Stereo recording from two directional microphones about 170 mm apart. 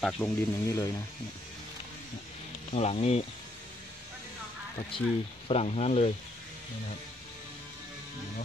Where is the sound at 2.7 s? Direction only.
35° left (ahead or behind).